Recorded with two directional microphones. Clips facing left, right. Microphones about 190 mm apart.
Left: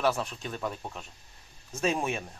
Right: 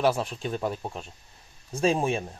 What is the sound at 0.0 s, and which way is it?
Speech, 30° right (ahead or behind).